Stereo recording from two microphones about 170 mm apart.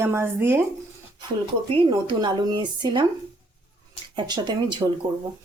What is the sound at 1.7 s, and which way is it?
Speech, 30° right (ahead or behind).